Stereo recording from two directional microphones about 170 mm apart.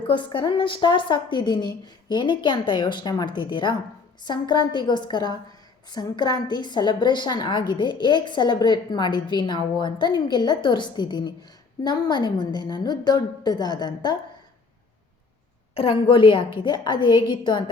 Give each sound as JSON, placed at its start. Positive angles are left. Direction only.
{"t": 0.1, "sound": "a woman's voice", "side_deg": 30}
{"t": 15.7, "sound": "a woman's voice", "side_deg": 35}